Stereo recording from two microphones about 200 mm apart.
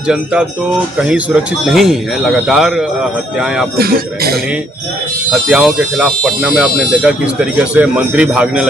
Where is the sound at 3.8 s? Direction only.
50° right (ahead or behind).